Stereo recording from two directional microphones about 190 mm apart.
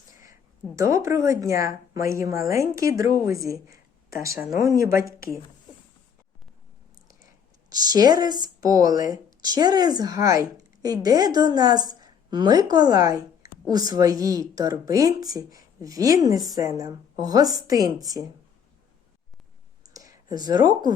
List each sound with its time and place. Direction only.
0.8 s speech: 15° right (ahead or behind)
7.7 s speech: 20° right (ahead or behind)
19.8 s a sound: 20° right (ahead or behind)